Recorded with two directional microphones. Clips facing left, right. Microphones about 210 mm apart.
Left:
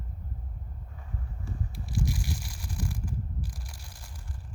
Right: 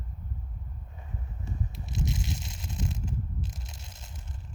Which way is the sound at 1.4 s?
20° right (ahead or behind).